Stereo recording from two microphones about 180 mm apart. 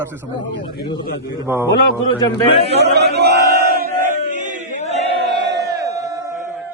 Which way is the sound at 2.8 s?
65° right (ahead or behind).